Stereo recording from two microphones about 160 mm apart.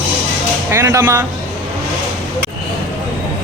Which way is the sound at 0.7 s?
15° right (ahead or behind).